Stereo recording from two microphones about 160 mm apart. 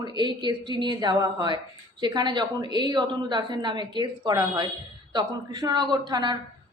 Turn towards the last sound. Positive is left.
turn(degrees=-30)  # may be behind; listen again after turning